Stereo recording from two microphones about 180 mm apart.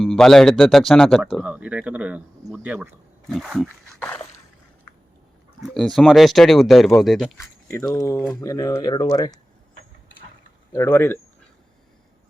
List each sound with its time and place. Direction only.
0.0 s a man's voice: 5° left (ahead or behind); by 2.9 s 10° right (ahead or behind)
3.2 s a man's voice: centre (ahead or behind)
4.0 s speech: 10° left (ahead or behind)
5.6 s a man's voice: centre (ahead or behind)
7.7 s speech: 20° left (ahead or behind)
10.8 s speech: 10° left (ahead or behind)